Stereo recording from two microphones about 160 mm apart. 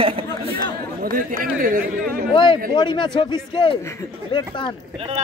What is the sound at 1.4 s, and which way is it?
Speech, 60° right (ahead or behind).